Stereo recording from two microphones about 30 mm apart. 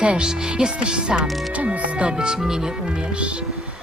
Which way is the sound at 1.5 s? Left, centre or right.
Right.